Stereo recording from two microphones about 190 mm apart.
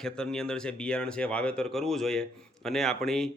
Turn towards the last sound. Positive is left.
turn(degrees=0)  # may be behind; listen again after turning